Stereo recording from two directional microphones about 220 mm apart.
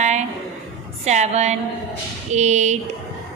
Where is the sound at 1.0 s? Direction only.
30° right (ahead or behind).